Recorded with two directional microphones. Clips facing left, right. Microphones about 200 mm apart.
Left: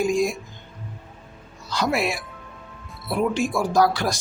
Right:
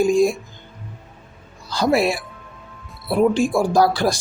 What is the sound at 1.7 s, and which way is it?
Speech, 35° right (ahead or behind).